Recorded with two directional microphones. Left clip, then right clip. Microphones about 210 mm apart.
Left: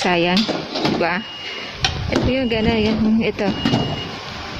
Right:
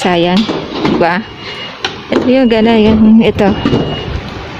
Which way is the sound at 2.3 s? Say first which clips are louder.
Right 13 dB; 30° right (ahead or behind).